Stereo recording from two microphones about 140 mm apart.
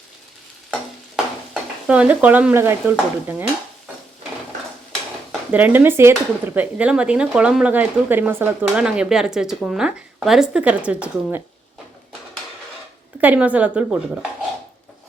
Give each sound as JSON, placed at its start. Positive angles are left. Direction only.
{"t": 1.9, "sound": "speech", "side_deg": -10}
{"t": 5.5, "sound": "speech", "side_deg": -10}
{"t": 13.2, "sound": "speech", "side_deg": -10}